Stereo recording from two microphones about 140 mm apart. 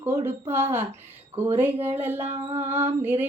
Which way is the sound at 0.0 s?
15° right (ahead or behind).